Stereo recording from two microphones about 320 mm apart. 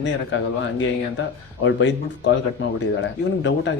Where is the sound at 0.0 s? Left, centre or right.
Left.